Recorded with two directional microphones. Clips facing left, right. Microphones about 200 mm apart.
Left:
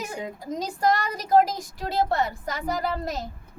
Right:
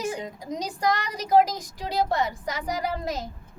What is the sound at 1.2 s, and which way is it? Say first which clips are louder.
Speech: even; 20° right (ahead or behind).